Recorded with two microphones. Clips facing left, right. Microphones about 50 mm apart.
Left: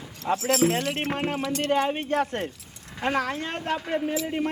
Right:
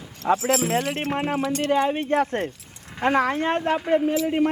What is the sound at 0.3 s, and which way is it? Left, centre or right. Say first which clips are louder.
Speech: right 2 dB; centre.